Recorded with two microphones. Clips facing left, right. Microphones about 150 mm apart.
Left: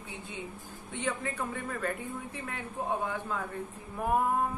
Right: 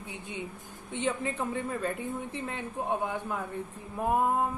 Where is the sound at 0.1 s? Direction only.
20° right (ahead or behind).